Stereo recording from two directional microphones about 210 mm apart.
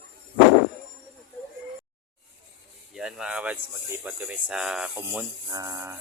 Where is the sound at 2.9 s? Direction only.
Centre (ahead or behind).